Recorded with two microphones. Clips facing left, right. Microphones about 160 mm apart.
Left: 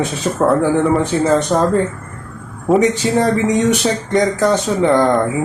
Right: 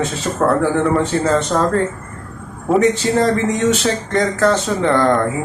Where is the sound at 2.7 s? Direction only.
Centre (ahead or behind).